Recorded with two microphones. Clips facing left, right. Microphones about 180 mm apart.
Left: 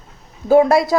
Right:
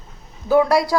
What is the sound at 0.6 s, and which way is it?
Speech, 25° left (ahead or behind).